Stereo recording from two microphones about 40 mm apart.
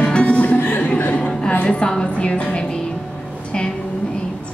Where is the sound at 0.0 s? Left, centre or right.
Left.